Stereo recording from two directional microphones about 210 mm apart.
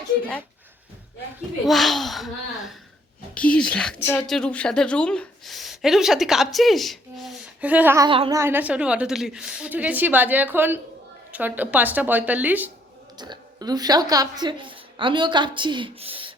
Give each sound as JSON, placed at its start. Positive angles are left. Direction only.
{"t": 1.6, "sound": "speech", "side_deg": 0}
{"t": 8.1, "sound": "speech", "side_deg": -25}
{"t": 8.4, "sound": "a woman's voice", "side_deg": -10}
{"t": 13.1, "sound": "a woman's voice", "side_deg": -20}